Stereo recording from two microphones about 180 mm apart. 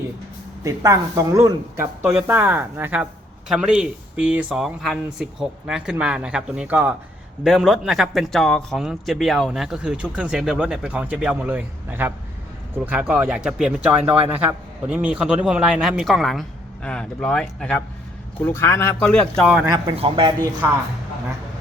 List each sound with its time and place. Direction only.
0.6 s speech: 20° right (ahead or behind); by 19.6 s centre (ahead or behind)
19.6 s a man's voice: 20° right (ahead or behind)